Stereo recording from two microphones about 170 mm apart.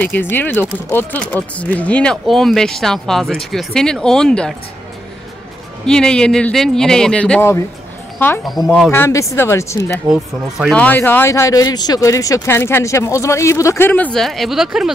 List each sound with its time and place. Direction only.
0.0 s speech: 10° left (ahead or behind)
5.9 s speech: 5° left (ahead or behind)
8.6 s speech: centre (ahead or behind)
8.9 s speech: 15° left (ahead or behind)
10.0 s speech: 5° right (ahead or behind)
10.7 s speech: 10° left (ahead or behind)